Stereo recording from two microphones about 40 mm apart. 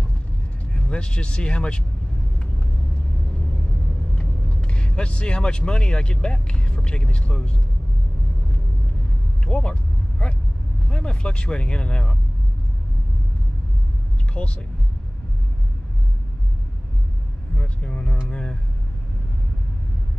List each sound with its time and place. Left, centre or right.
0.7 s speech: left
4.1 s speech: left
9.5 s vehicle: left
10.9 s speech: left
14.3 s speech: left
17.6 s vehicle: left